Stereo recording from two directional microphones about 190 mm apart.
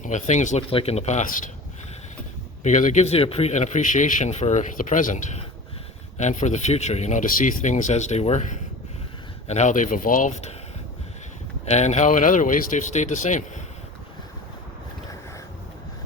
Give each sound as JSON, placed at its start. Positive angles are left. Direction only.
{"t": 0.0, "sound": "speech", "side_deg": 40}
{"t": 2.6, "sound": "speech", "side_deg": 40}
{"t": 11.6, "sound": "speech", "side_deg": 35}